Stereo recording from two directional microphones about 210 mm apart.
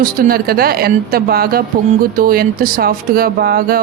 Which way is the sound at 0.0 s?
45° right (ahead or behind).